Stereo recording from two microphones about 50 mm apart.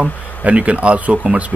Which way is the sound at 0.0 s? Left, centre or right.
Right.